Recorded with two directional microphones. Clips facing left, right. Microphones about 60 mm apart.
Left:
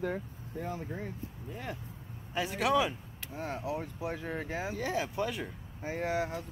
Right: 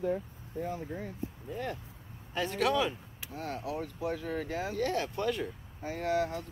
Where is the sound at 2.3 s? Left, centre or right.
Centre.